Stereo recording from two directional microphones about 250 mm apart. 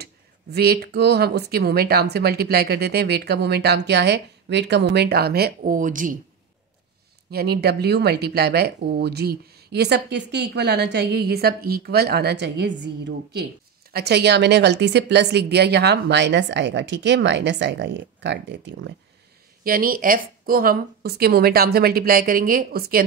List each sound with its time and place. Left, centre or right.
0.0 s speech: right
7.2 s speech: right